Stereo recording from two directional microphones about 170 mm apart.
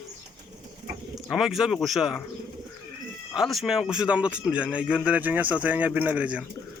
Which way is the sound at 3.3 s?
Centre (ahead or behind).